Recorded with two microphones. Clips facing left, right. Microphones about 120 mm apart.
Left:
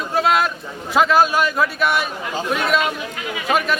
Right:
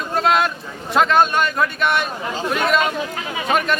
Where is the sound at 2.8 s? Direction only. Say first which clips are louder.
Right 1 dB; 30° right (ahead or behind).